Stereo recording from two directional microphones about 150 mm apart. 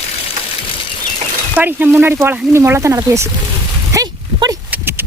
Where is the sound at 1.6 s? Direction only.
10° right (ahead or behind).